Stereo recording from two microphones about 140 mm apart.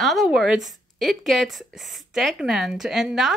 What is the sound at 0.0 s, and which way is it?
A woman's voice, centre (ahead or behind).